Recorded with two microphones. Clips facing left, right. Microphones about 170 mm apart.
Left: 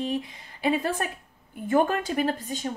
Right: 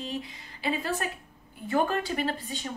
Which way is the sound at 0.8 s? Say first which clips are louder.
Left 3 dB; 50° left (ahead or behind).